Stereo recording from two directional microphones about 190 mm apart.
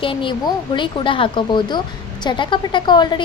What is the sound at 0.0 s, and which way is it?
A woman's voice, 25° left (ahead or behind).